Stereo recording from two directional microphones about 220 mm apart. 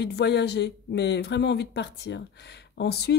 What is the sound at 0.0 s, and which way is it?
Speech, 50° left (ahead or behind).